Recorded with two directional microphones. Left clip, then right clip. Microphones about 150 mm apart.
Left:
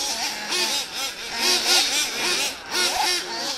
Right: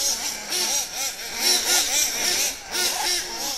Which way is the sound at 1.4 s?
60° left (ahead or behind).